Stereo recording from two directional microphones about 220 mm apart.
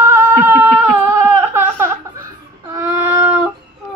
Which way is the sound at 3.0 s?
5° right (ahead or behind).